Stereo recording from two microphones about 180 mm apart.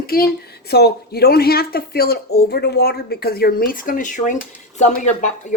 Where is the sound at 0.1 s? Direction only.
55° left (ahead or behind).